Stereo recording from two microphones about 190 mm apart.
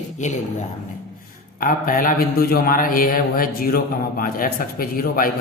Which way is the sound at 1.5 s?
45° left (ahead or behind).